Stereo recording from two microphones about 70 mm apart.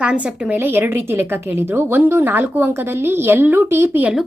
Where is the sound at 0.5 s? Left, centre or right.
Right.